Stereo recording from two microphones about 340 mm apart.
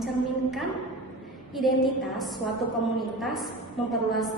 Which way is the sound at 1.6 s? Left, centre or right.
Centre.